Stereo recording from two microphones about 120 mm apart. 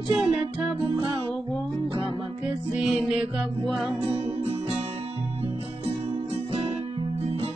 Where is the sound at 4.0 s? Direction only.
55° right (ahead or behind).